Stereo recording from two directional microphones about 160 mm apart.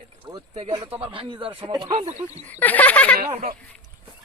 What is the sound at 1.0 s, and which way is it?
Speech, 35° right (ahead or behind).